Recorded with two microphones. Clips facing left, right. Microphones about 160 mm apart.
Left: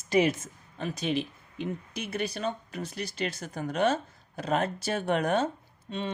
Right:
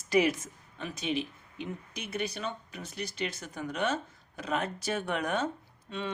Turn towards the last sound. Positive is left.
turn(degrees=25)  # may be behind; listen again after turning